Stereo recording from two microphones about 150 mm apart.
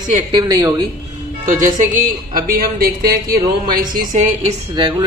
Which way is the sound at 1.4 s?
60° right (ahead or behind).